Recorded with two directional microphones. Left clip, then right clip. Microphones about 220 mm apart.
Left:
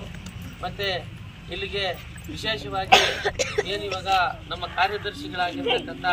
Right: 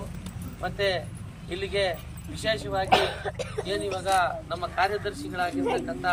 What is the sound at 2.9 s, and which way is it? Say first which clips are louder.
Speech: left 9 dB; 45° right (ahead or behind).